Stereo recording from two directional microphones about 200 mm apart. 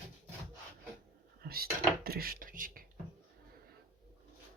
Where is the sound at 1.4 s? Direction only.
50° right (ahead or behind).